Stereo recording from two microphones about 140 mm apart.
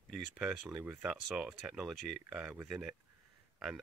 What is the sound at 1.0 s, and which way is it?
Speech, 5° right (ahead or behind).